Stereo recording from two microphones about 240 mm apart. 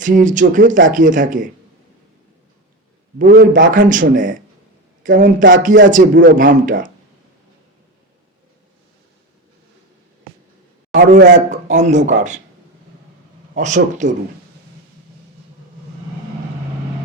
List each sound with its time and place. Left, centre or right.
0.0 s speech: right
3.2 s speech: right
3.7 s speech: right
10.9 s a man's voice: right
11.3 s speech: right
13.5 s speech: right